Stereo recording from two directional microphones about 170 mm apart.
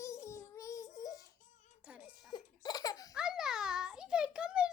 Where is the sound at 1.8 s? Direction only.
10° right (ahead or behind).